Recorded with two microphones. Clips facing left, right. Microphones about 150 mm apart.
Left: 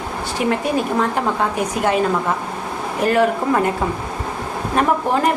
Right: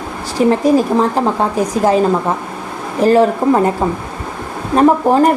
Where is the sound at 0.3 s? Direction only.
35° right (ahead or behind).